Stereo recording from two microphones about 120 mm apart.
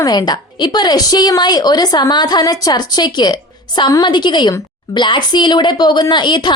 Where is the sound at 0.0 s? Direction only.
35° left (ahead or behind).